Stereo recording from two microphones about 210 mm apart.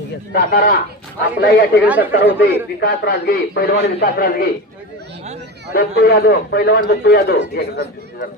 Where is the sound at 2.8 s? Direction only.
45° left (ahead or behind).